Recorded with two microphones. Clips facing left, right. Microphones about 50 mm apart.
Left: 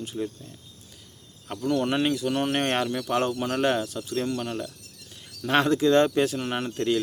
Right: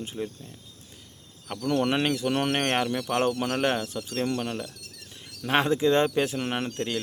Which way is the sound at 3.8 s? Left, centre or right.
Right.